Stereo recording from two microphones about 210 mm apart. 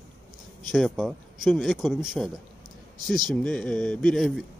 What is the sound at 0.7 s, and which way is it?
Speech, centre (ahead or behind).